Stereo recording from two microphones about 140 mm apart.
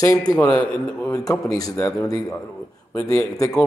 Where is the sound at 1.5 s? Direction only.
25° left (ahead or behind).